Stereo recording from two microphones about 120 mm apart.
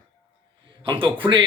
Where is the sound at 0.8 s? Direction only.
45° right (ahead or behind).